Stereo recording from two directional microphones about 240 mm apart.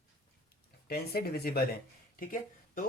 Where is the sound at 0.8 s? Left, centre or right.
Left.